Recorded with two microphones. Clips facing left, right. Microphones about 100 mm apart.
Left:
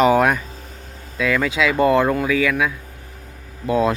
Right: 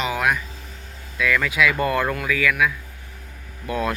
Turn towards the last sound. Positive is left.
turn(degrees=25)  # may be behind; listen again after turning